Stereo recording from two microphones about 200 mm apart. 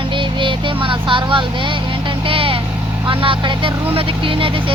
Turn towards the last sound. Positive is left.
turn(degrees=-25)  # may be behind; listen again after turning